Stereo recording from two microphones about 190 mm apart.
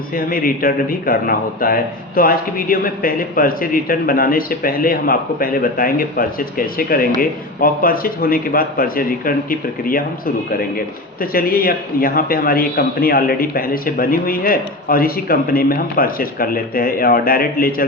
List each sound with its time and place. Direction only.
0.1 s a man's voice: 50° left (ahead or behind)